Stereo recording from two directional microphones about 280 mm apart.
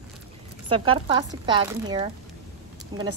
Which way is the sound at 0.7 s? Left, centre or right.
Centre.